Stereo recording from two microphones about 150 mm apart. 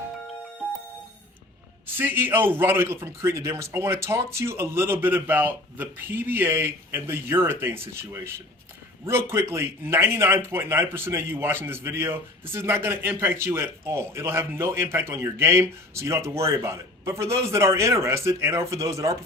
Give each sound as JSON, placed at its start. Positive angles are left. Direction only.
{"t": 2.0, "sound": "a man's voice", "side_deg": -15}